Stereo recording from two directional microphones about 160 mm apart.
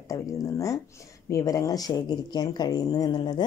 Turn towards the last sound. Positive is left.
turn(degrees=25)  # may be behind; listen again after turning